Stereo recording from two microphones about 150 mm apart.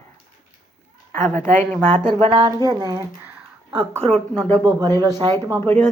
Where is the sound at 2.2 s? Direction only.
40° right (ahead or behind).